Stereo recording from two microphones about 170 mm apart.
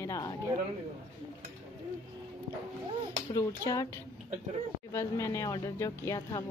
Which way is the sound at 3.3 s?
20° left (ahead or behind).